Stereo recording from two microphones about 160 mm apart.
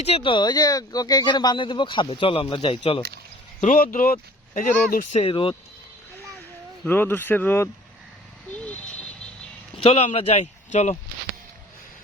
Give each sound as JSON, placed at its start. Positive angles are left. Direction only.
{"t": 0.0, "sound": "speech", "side_deg": 35}
{"t": 3.6, "sound": "speech", "side_deg": 55}
{"t": 5.1, "sound": "speech", "side_deg": 35}
{"t": 6.8, "sound": "speech", "side_deg": 15}
{"t": 9.7, "sound": "speech", "side_deg": 40}